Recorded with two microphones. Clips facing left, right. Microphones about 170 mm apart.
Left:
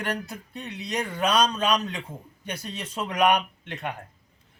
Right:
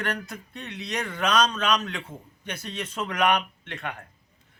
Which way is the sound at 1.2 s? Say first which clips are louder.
Left 1 dB; 35° left (ahead or behind).